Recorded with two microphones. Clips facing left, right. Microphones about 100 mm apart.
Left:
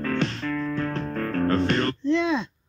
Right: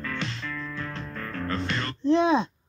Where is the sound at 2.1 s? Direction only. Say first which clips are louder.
Right 3 dB; 50° right (ahead or behind).